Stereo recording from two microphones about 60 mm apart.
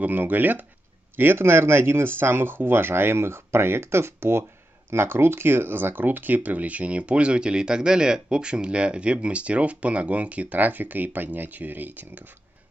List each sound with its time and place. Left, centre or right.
0.0 s speech: right